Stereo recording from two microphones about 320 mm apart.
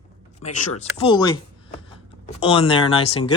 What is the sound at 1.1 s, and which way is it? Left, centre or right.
Speech, centre.